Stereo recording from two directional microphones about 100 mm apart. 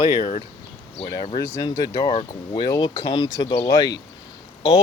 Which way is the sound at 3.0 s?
55° left (ahead or behind).